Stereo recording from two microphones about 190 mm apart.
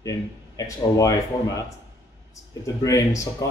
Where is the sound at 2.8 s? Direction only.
15° left (ahead or behind).